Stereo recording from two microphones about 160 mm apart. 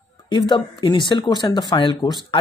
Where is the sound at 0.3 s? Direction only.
30° left (ahead or behind).